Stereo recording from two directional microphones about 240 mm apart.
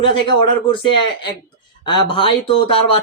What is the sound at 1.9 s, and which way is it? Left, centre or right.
Speech, left.